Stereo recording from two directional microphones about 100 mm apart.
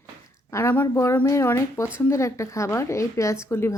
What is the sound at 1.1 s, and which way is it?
Speech, 30° left (ahead or behind).